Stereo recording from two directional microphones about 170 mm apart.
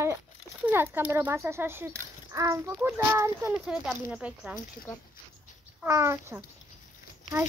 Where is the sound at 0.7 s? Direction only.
15° right (ahead or behind).